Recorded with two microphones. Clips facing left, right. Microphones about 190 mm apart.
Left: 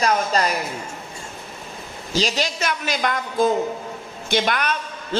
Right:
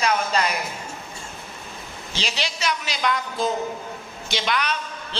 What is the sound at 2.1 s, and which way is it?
A man's voice, 40° left (ahead or behind).